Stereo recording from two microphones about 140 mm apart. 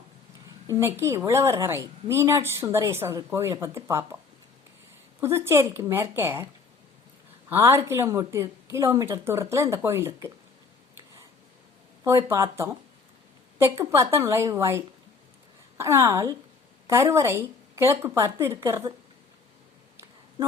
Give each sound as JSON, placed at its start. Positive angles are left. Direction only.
{"t": 0.7, "sound": "a woman's voice", "side_deg": -20}
{"t": 5.2, "sound": "speech", "side_deg": -20}
{"t": 7.5, "sound": "a woman's voice", "side_deg": -20}
{"t": 12.0, "sound": "a woman's voice", "side_deg": -20}